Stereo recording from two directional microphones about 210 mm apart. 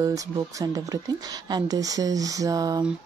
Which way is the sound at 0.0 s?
15° right (ahead or behind).